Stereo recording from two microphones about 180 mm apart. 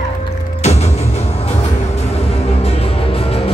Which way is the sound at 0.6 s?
35° left (ahead or behind).